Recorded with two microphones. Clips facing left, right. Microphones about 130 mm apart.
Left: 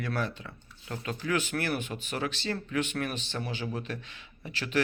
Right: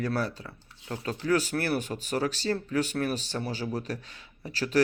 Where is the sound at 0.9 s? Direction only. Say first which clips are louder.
Right 2 dB; 25° right (ahead or behind).